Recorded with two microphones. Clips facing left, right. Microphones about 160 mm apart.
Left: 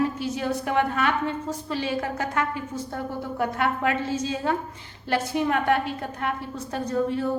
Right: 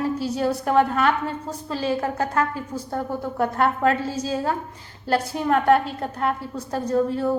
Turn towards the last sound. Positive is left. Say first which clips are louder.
# right 3 dB
turn(degrees=-30)  # may be behind; listen again after turning